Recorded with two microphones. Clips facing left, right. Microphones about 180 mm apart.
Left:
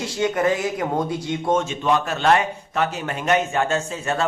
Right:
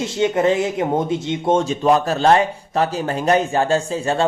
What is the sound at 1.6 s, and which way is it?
Speech, 35° right (ahead or behind).